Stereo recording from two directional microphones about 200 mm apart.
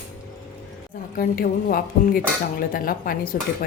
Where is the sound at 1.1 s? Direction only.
45° left (ahead or behind).